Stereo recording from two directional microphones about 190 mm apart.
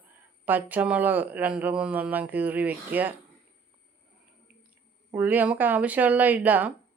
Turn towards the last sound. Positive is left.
turn(degrees=-10)  # may be behind; listen again after turning